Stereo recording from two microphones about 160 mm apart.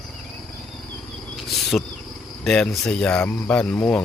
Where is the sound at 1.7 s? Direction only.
5° left (ahead or behind).